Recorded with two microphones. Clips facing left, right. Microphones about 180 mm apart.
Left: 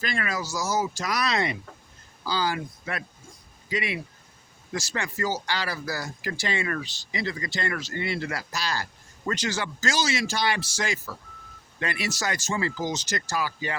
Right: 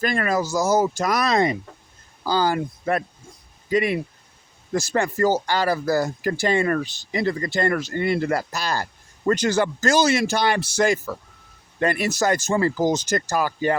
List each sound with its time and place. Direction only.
0.0 s speech: 50° right (ahead or behind)